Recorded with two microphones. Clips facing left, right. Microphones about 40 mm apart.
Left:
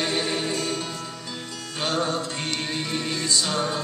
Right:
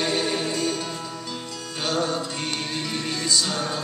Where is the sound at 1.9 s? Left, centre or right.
Left.